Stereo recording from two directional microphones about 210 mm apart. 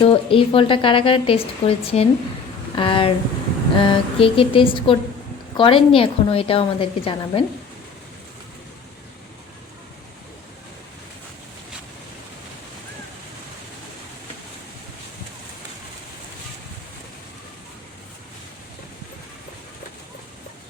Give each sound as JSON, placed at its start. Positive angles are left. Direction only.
{"t": 0.0, "sound": "a woman's voice", "side_deg": 25}